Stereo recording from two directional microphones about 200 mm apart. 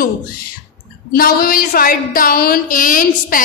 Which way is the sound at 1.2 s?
45° left (ahead or behind).